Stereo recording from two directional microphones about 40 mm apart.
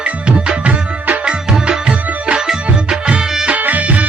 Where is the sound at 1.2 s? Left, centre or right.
Right.